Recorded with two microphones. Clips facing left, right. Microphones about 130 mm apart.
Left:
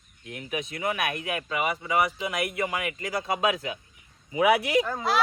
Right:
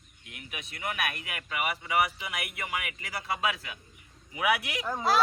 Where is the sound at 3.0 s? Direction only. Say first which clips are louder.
Left 8 dB; 40° left (ahead or behind).